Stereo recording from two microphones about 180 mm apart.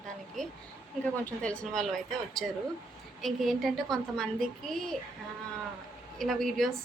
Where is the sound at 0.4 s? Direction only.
5° left (ahead or behind).